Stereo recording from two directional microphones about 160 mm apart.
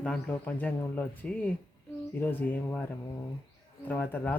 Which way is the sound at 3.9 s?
10° left (ahead or behind).